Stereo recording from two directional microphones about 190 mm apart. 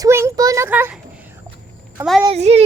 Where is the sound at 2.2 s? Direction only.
35° right (ahead or behind).